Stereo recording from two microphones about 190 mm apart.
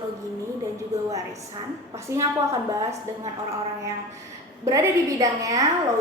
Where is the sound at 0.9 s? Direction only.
15° right (ahead or behind).